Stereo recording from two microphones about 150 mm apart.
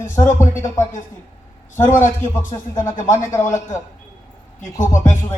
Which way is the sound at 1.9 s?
15° left (ahead or behind).